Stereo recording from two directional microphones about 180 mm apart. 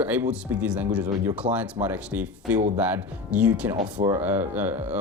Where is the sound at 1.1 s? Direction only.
20° right (ahead or behind).